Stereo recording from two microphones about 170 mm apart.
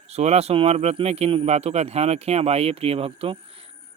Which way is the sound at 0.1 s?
40° right (ahead or behind).